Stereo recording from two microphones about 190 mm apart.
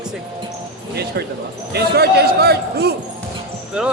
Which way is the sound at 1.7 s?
55° right (ahead or behind).